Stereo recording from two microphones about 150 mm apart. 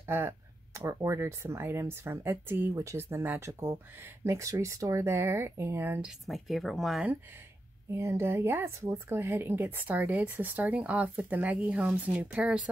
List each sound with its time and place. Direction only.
0.0 s speech: 15° right (ahead or behind)
7.9 s speech: 15° right (ahead or behind)